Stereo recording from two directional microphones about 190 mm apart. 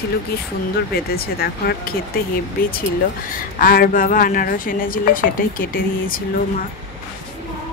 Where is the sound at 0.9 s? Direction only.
55° left (ahead or behind).